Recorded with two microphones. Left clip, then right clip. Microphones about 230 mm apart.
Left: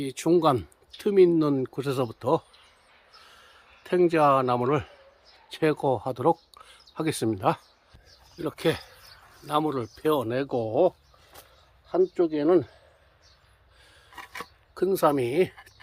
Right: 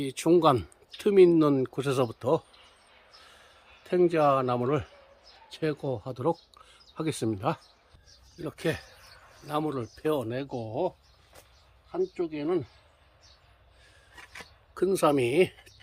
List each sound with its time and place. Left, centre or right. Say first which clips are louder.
0.0 s speech: even; centre
3.8 s speech: left 2 dB; centre
14.8 s speech: left 1 dB; centre